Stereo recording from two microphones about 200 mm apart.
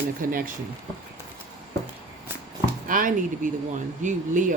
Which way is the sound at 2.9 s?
40° right (ahead or behind).